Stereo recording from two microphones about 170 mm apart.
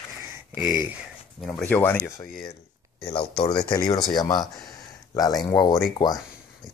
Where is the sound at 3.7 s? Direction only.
25° left (ahead or behind).